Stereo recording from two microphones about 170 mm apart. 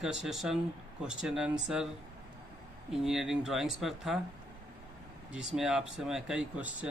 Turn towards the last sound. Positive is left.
turn(degrees=-5)  # may be behind; listen again after turning